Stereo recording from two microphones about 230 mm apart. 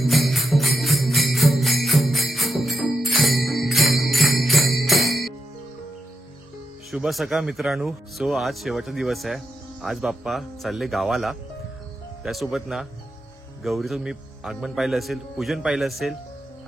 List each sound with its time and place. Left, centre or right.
0.0 s jingle bell: centre
6.9 s speech: centre